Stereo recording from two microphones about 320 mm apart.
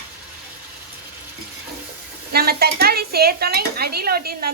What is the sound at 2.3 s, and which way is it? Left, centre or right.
Speech, right.